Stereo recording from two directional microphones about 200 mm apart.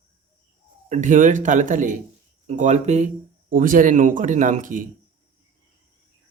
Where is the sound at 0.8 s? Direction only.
40° right (ahead or behind).